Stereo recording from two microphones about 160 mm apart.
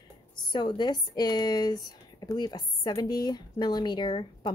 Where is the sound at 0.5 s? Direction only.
30° left (ahead or behind).